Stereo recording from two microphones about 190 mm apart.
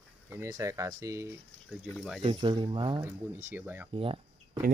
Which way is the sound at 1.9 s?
Centre (ahead or behind).